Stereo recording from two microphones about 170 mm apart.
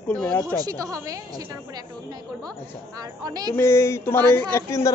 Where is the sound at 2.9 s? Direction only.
20° right (ahead or behind).